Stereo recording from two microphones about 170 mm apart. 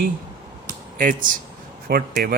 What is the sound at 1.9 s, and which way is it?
Speech, 60° right (ahead or behind).